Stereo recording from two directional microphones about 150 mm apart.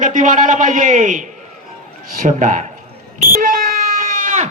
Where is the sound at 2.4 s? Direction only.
55° right (ahead or behind).